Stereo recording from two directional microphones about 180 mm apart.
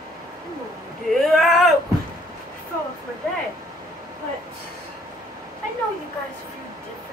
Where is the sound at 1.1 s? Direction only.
Centre (ahead or behind).